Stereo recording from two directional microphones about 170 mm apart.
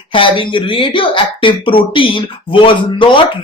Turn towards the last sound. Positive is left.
turn(degrees=30)  # may be behind; listen again after turning